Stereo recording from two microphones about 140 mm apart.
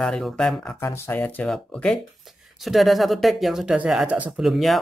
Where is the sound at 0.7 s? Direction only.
20° left (ahead or behind); by 4.7 s centre (ahead or behind).